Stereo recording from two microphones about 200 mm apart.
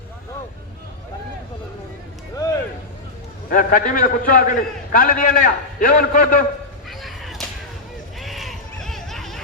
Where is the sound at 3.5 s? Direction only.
45° left (ahead or behind).